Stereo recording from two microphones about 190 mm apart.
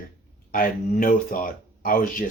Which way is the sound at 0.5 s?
50° left (ahead or behind).